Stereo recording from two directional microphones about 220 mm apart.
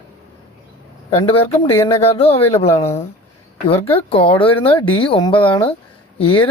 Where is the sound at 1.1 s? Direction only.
25° left (ahead or behind).